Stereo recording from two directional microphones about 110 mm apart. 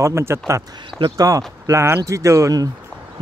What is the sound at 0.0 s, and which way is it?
Speech, 25° right (ahead or behind).